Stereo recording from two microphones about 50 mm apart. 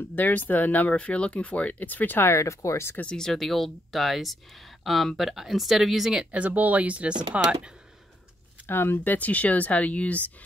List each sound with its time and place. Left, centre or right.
0.1 s speech: left
2.2 s speech: left
3.2 s speech: centre
6.3 s speech: right
8.6 s speech: left